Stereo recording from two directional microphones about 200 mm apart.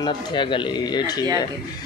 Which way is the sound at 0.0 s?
25° left (ahead or behind).